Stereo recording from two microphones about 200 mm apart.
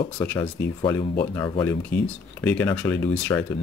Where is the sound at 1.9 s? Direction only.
10° left (ahead or behind).